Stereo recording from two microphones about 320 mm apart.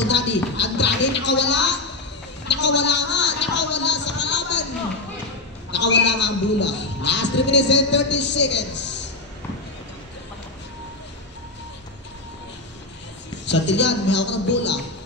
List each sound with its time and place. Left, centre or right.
0.1 s a sound: left
5.7 s music: left
7.4 s speech: left
13.5 s speech: left